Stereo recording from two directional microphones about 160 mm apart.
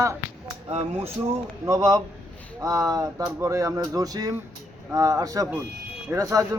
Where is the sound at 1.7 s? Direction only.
20° right (ahead or behind).